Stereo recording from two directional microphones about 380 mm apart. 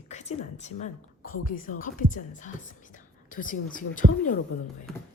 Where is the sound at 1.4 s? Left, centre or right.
Left.